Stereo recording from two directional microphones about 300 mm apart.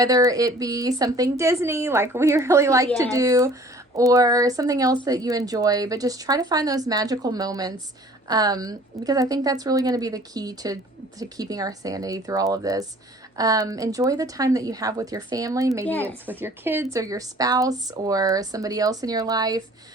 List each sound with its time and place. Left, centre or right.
0.0 s speech: centre
15.9 s speech: centre
16.2 s speech: centre